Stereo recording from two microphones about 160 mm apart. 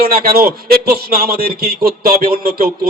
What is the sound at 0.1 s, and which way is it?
A man's voice, 70° right (ahead or behind).